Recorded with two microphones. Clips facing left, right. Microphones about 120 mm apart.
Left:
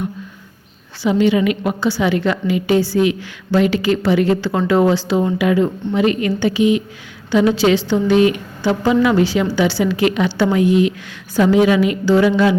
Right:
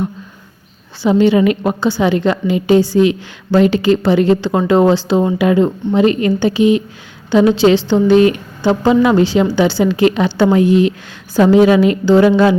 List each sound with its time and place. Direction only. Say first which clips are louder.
1.0 s a woman's voice: right 4 dB; 30° right (ahead or behind)
8.6 s a woman's voice: right 3 dB; 25° right (ahead or behind)